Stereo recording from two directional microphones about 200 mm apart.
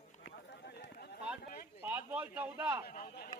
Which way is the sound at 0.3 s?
55° left (ahead or behind).